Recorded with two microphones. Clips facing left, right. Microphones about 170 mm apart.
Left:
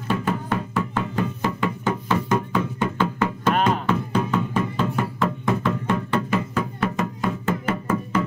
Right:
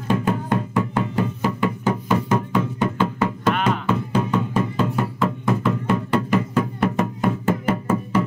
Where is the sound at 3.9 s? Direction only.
10° right (ahead or behind).